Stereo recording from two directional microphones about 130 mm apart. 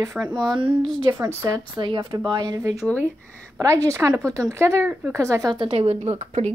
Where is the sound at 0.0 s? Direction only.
30° right (ahead or behind).